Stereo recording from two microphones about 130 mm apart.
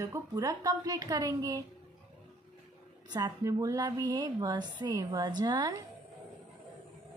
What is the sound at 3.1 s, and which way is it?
A woman's voice, 30° right (ahead or behind).